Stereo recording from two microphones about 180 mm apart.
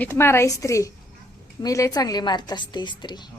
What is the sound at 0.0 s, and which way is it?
A woman's voice, 15° left (ahead or behind).